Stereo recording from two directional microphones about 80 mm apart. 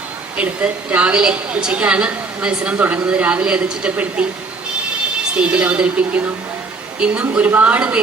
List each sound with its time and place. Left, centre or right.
0.3 s a woman's voice: centre
5.4 s a woman's voice: centre